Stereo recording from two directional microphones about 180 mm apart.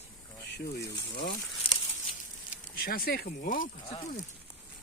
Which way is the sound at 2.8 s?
55° left (ahead or behind).